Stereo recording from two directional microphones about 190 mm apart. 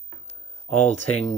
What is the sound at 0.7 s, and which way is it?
Speech, 35° left (ahead or behind).